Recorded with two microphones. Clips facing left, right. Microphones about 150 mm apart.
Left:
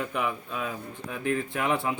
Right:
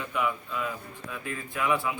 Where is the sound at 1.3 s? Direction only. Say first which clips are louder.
Left 5 dB; 65° left (ahead or behind).